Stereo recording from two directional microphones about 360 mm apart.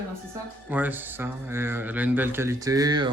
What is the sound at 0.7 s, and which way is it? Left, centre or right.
A man's voice, centre.